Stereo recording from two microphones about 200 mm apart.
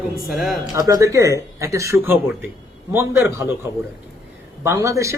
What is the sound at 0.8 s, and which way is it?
A man's voice, 20° right (ahead or behind).